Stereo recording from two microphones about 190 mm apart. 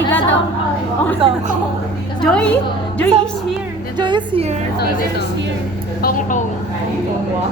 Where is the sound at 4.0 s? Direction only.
25° right (ahead or behind).